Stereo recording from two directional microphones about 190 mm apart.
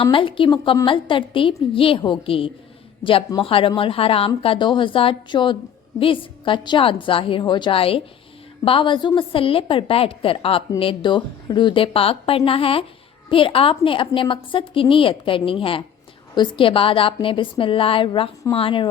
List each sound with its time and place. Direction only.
0.0 s speech: 25° left (ahead or behind)